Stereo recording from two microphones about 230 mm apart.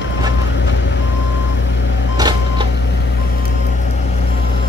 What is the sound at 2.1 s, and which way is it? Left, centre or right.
Printer, centre.